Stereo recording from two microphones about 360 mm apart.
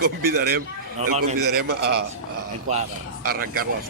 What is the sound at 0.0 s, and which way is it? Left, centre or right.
A man's voice, right.